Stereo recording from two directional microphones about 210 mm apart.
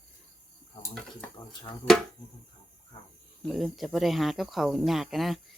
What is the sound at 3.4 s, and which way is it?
Speech, centre (ahead or behind).